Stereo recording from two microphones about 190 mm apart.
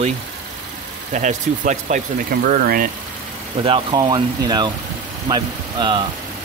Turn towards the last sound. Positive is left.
turn(degrees=-20)  # may be behind; listen again after turning